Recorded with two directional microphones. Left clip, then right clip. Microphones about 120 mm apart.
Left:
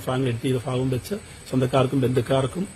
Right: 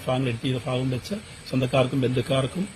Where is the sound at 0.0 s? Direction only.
30° left (ahead or behind).